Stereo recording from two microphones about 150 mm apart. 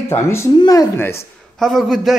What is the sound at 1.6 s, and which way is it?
Speech, 5° left (ahead or behind).